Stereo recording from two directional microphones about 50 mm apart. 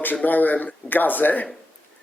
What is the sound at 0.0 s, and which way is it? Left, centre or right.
Speech, left.